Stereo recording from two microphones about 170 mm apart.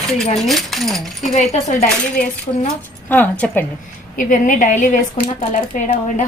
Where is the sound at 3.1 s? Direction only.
10° left (ahead or behind).